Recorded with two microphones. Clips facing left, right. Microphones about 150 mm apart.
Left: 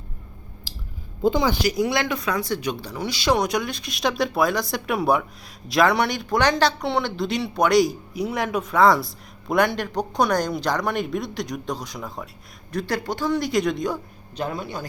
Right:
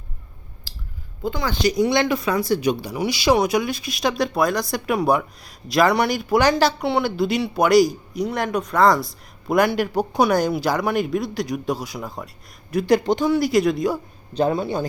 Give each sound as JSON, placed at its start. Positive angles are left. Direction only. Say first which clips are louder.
{"t": 1.2, "sound": "speech", "louder": "left 5 dB", "side_deg": 20}
{"t": 1.6, "sound": "speech", "louder": "right 4 dB", "side_deg": 5}
{"t": 12.7, "sound": "speech", "louder": "right 8 dB", "side_deg": -15}
{"t": 13.3, "sound": "speech", "louder": "right 1 dB", "side_deg": -5}
{"t": 14.3, "sound": "a man's voice", "louder": "right 8 dB", "side_deg": -30}